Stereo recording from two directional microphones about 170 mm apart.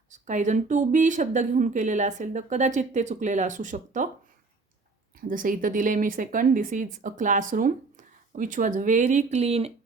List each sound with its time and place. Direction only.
0.1 s speech: 45° right (ahead or behind)
5.3 s speech: 55° right (ahead or behind); by 9.7 s 35° right (ahead or behind)